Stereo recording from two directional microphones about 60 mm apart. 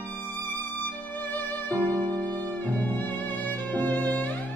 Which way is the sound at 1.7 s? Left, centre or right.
Right.